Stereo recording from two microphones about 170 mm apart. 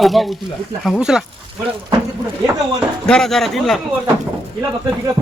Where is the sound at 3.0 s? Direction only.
5° left (ahead or behind).